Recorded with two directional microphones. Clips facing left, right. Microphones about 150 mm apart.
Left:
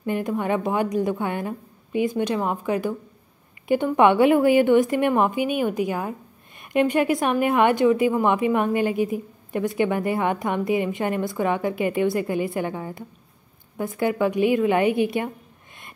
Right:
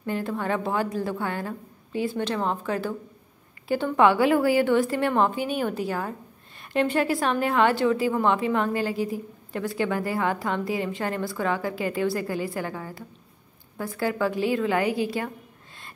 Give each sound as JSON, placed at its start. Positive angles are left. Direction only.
{"t": 0.0, "sound": "a woman's voice", "side_deg": 15}